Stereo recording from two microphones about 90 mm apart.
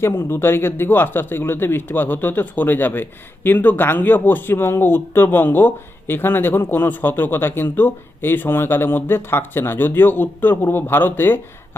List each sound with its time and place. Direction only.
0.0 s speech: 25° left (ahead or behind)